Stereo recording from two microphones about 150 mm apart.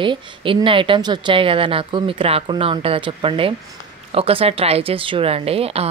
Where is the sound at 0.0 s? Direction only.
35° right (ahead or behind).